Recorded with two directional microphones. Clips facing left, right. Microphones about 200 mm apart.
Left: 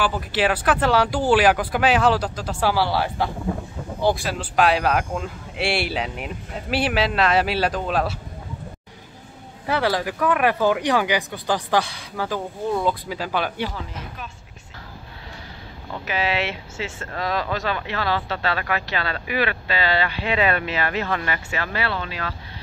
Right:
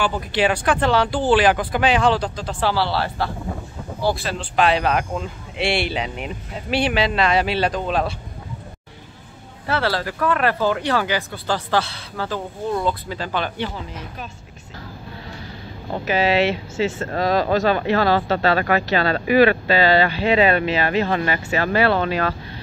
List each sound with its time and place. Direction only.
0.0 s speech: 5° left (ahead or behind)
9.7 s speech: 15° left (ahead or behind)
15.9 s speech: 35° right (ahead or behind)